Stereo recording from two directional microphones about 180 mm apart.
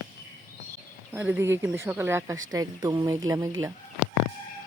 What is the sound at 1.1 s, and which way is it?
A woman's voice, 10° right (ahead or behind).